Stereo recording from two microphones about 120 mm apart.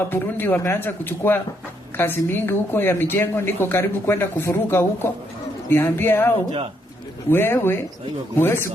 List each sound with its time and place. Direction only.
0.1 s a woman's voice: 15° left (ahead or behind)